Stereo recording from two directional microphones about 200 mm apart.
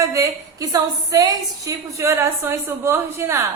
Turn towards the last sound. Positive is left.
turn(degrees=-15)  # may be behind; listen again after turning